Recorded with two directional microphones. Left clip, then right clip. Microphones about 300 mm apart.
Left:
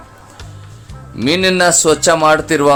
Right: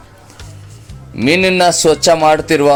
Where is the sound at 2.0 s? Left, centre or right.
Centre.